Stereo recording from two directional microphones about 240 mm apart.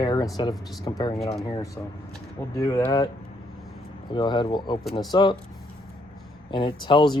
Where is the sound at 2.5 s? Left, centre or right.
Centre.